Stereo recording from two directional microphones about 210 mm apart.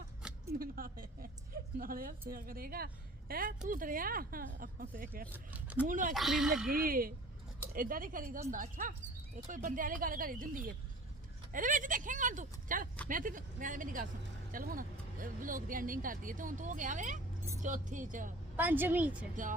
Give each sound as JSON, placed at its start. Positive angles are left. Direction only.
{"t": 0.6, "sound": "a woman's voice", "side_deg": -45}
{"t": 5.3, "sound": "a woman's voice", "side_deg": -5}
{"t": 5.9, "sound": "speech", "side_deg": -40}
{"t": 6.1, "sound": "speech", "side_deg": 0}
{"t": 6.7, "sound": "a woman's voice", "side_deg": -45}
{"t": 18.5, "sound": "a woman's voice", "side_deg": -10}
{"t": 19.4, "sound": "speech", "side_deg": -40}